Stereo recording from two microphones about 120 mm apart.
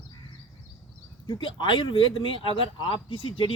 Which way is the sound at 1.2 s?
40° left (ahead or behind).